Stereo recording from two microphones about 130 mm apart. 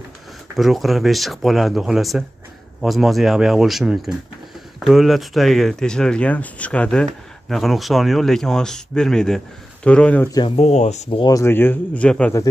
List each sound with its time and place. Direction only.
0.6 s speech: centre (ahead or behind)
10.4 s speech: 50° left (ahead or behind)
11.2 s speech: 25° left (ahead or behind)